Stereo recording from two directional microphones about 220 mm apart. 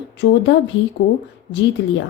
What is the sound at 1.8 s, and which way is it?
Speech, 55° left (ahead or behind).